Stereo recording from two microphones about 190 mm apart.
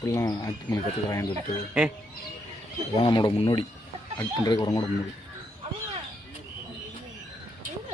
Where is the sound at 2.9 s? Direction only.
25° left (ahead or behind).